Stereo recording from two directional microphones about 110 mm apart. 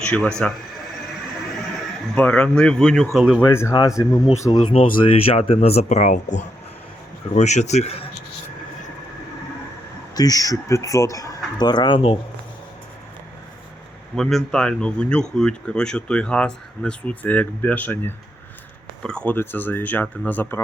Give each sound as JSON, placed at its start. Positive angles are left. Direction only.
{"t": 0.0, "sound": "speech", "side_deg": 10}
{"t": 2.1, "sound": "speech", "side_deg": 10}
{"t": 3.5, "sound": "speech", "side_deg": 25}
{"t": 4.7, "sound": "speech", "side_deg": 60}
{"t": 7.3, "sound": "a man's voice", "side_deg": 90}
{"t": 10.2, "sound": "speech", "side_deg": 35}
{"t": 14.2, "sound": "speech", "side_deg": 5}